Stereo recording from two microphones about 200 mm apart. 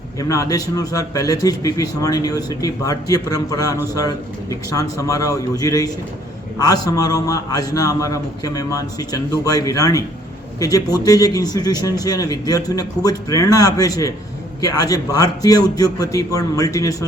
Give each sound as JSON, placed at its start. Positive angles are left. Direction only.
{"t": 0.2, "sound": "a man's voice", "side_deg": 15}